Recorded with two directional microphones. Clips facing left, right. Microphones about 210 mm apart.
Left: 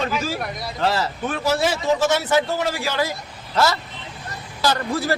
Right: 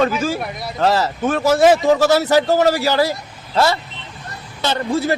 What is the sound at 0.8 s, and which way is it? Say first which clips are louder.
A man's voice: right 6 dB; 40° right (ahead or behind).